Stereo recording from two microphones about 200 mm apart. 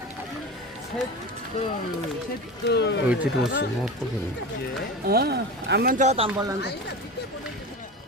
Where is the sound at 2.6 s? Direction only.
60° left (ahead or behind).